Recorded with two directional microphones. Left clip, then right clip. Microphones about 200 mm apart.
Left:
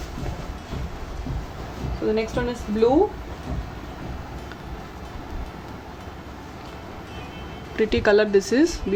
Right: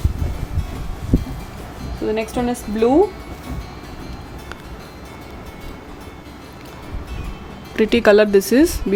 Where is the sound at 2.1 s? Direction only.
60° right (ahead or behind).